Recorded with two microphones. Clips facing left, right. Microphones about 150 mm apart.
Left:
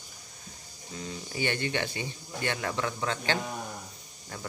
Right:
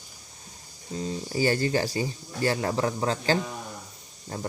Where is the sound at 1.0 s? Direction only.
35° right (ahead or behind).